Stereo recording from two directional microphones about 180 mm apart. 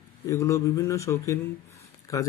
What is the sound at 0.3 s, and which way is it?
Speech, 15° left (ahead or behind).